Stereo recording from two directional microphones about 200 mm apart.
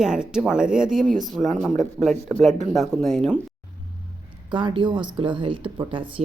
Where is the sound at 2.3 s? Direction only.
Centre (ahead or behind).